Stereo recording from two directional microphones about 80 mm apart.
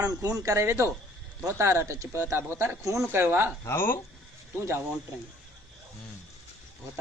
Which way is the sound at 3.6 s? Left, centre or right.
Left.